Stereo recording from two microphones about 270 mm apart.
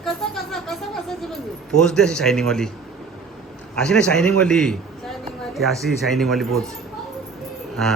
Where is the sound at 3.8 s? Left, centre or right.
Centre.